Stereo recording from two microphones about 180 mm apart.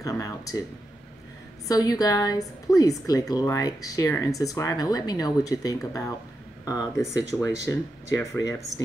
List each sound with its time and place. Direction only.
0.0 s speech: 20° left (ahead or behind)
1.7 s speech: 20° left (ahead or behind)